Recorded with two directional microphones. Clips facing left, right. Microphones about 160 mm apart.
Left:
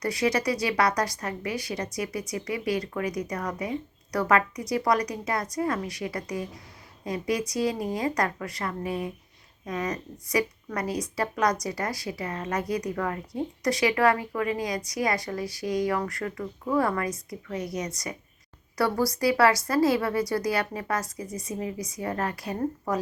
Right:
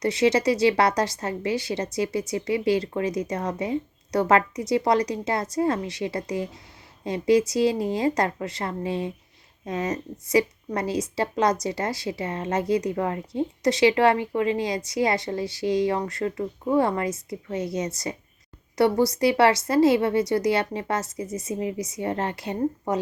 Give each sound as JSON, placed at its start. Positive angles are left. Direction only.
{"t": 0.0, "sound": "a woman's voice", "side_deg": -25}